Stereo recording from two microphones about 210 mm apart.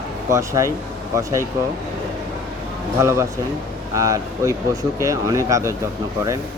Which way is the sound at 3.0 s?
15° right (ahead or behind).